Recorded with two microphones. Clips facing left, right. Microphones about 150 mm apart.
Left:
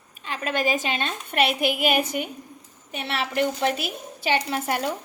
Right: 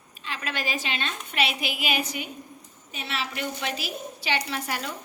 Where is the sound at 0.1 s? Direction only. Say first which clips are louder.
Left 6 dB; 50° left (ahead or behind).